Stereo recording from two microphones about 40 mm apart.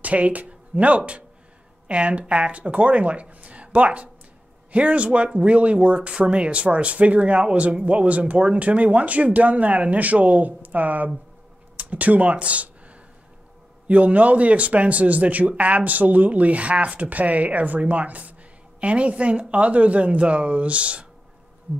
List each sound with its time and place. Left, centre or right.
0.0 s speech: right